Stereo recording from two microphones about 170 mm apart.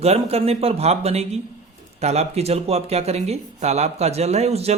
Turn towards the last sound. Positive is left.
turn(degrees=-40)  # may be behind; listen again after turning